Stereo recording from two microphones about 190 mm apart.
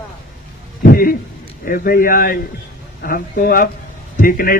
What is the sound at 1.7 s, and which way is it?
A man's voice, 50° left (ahead or behind).